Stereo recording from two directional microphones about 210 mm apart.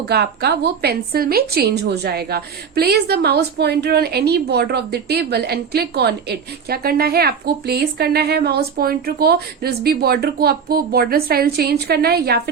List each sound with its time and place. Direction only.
0.1 s a woman's voice: 50° right (ahead or behind)